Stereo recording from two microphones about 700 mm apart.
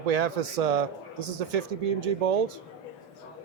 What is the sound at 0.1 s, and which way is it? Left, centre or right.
Speech, right.